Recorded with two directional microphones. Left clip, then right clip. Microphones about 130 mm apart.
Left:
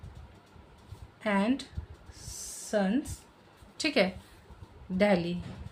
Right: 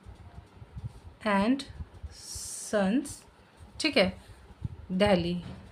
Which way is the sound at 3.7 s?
40° right (ahead or behind).